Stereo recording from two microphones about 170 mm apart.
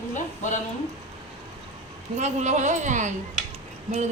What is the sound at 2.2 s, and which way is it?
Speech, 45° right (ahead or behind).